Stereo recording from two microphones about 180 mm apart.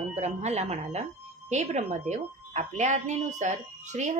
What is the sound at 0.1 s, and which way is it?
Speech, 40° right (ahead or behind).